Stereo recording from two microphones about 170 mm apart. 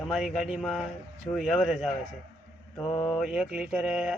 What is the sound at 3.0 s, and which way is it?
Mantra, 5° left (ahead or behind).